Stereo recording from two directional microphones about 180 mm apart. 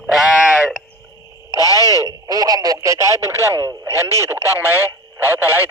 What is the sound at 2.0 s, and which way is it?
A man's voice, 20° right (ahead or behind).